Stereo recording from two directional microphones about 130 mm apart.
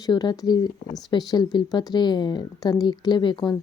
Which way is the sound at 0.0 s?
30° left (ahead or behind).